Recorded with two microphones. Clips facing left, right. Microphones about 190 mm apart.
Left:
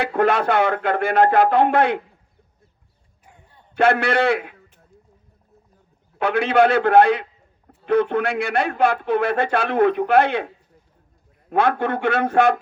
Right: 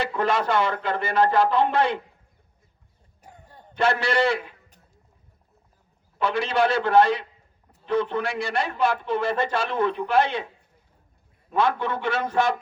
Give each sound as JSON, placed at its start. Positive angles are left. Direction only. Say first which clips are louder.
{"t": 0.0, "sound": "speech", "louder": "left 5 dB", "side_deg": 60}
{"t": 3.2, "sound": "a sound", "louder": "right 4 dB", "side_deg": -40}
{"t": 3.8, "sound": "speech", "louder": "left 4 dB", "side_deg": 55}
{"t": 6.1, "sound": "speech", "louder": "left 6 dB", "side_deg": 60}